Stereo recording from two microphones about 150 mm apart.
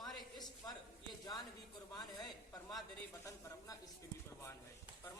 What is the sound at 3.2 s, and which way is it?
Speech, 20° left (ahead or behind).